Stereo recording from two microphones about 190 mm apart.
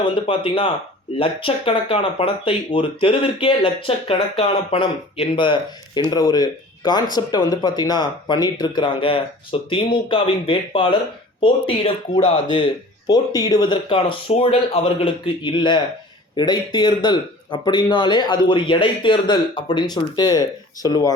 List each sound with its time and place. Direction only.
0.0 s speech: 25° left (ahead or behind)